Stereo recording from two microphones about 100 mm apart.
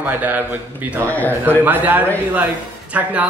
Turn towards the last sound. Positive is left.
turn(degrees=-15)  # may be behind; listen again after turning